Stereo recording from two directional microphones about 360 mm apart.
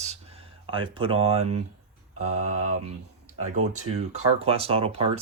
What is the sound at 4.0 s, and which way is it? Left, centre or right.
Speech, centre.